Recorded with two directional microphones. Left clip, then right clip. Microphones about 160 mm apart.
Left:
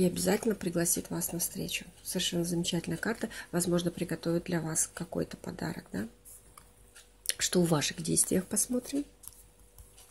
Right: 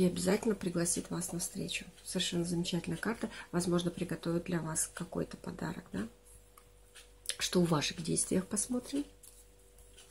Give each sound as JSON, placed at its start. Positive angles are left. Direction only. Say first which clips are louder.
{"t": 0.0, "sound": "speech", "louder": "left 2 dB", "side_deg": 30}
{"t": 7.2, "sound": "speech", "louder": "left 3 dB", "side_deg": 35}